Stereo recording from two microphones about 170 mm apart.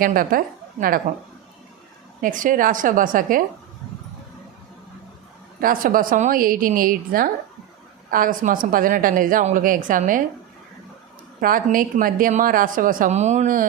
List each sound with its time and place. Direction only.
0.0 s a woman's voice: 55° right (ahead or behind)
2.2 s a woman's voice: 50° right (ahead or behind)
5.5 s a woman's voice: 55° right (ahead or behind)
11.3 s a woman's voice: 55° right (ahead or behind)